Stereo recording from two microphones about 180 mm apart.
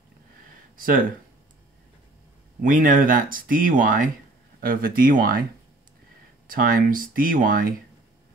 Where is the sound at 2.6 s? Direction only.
50° right (ahead or behind).